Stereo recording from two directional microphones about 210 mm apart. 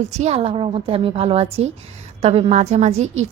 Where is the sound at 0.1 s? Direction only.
30° right (ahead or behind).